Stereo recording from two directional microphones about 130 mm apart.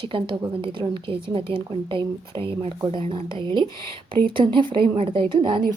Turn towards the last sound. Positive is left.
turn(degrees=-40)  # may be behind; listen again after turning